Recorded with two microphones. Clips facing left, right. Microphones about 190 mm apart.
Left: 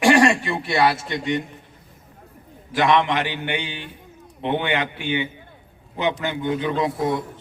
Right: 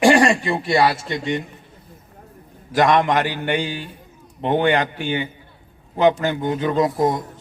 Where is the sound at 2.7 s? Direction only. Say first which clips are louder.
Right 2 dB; 45° right (ahead or behind).